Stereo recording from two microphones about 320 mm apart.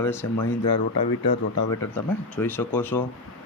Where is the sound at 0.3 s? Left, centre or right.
Left.